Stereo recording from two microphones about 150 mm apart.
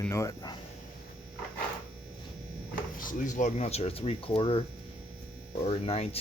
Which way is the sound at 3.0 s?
60° left (ahead or behind).